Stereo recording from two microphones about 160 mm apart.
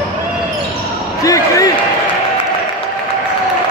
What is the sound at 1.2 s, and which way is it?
Basketball bounce, 20° left (ahead or behind).